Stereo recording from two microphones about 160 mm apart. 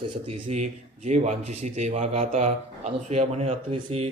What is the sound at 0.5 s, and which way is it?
Speech, 45° right (ahead or behind).